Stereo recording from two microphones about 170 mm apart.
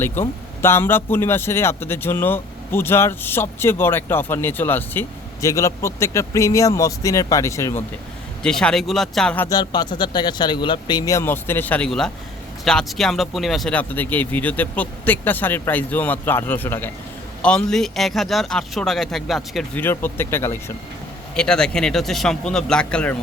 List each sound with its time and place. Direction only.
0.0 s speech: 10° left (ahead or behind)
8.4 s speech: 5° left (ahead or behind)
9.5 s a man's voice: 25° left (ahead or behind); by 19.8 s centre (ahead or behind)
19.8 s speech: 10° left (ahead or behind)